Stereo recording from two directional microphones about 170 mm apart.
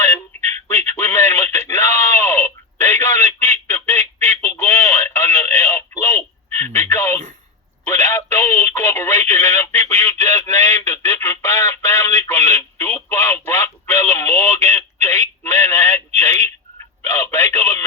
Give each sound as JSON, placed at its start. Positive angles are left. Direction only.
{"t": 0.3, "sound": "a sound", "side_deg": 15}
{"t": 6.7, "sound": "radio", "side_deg": 15}
{"t": 7.9, "sound": "telephone", "side_deg": 15}